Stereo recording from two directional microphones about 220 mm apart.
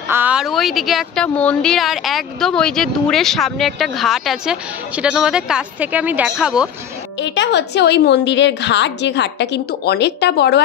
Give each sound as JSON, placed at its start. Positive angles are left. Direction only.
{"t": 0.1, "sound": "speech", "side_deg": -5}
{"t": 7.2, "sound": "a woman's voice", "side_deg": 55}